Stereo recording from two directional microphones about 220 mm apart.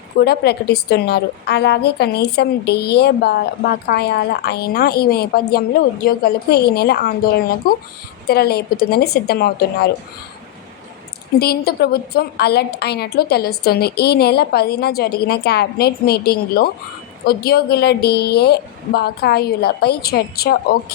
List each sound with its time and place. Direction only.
0.2 s a woman's voice: 45° left (ahead or behind)
11.3 s a woman's voice: 45° left (ahead or behind)